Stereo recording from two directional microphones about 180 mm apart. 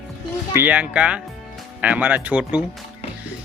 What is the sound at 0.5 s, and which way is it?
Speech, 10° right (ahead or behind).